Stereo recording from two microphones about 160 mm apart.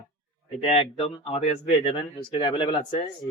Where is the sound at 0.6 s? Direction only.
35° left (ahead or behind).